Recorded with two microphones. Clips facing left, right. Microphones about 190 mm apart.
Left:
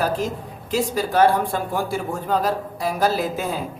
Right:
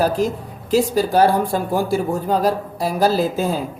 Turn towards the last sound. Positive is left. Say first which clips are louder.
# right 4 dB
turn(degrees=-30)  # may be behind; listen again after turning